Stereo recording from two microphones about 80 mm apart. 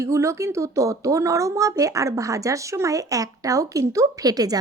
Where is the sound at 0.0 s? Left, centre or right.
Right.